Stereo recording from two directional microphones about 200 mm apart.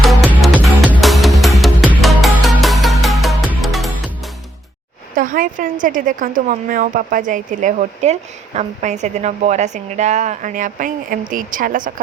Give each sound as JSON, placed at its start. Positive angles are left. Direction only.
{"t": 0.0, "sound": "music", "side_deg": -5}
{"t": 5.1, "sound": "a woman's voice", "side_deg": -45}